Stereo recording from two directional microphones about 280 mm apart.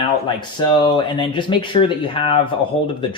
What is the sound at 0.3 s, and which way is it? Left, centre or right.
Speech, centre.